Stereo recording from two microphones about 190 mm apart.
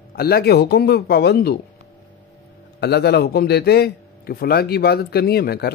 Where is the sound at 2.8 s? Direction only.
60° left (ahead or behind).